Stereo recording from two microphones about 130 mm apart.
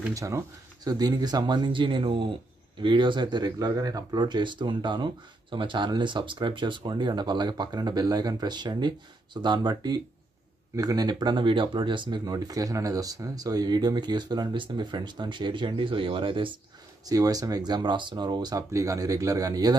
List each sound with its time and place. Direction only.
0.1 s speech: 25° right (ahead or behind); by 16.5 s 40° right (ahead or behind)
17.0 s speech: 25° right (ahead or behind)